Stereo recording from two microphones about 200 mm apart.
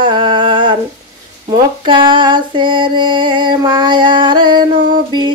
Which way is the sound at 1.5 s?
25° right (ahead or behind).